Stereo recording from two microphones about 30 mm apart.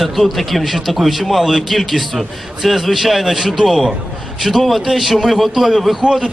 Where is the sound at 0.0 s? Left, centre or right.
Centre.